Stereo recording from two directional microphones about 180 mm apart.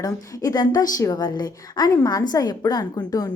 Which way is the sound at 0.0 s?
20° left (ahead or behind).